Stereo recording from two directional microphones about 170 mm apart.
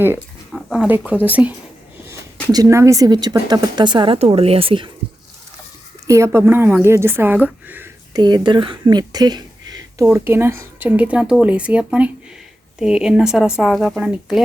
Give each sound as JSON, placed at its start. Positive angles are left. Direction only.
{"t": 0.5, "sound": "speech", "side_deg": -5}
{"t": 6.1, "sound": "speech", "side_deg": -15}
{"t": 8.1, "sound": "speech", "side_deg": -25}